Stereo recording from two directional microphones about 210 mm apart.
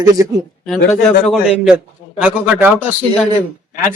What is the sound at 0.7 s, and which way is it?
A man's voice, centre (ahead or behind).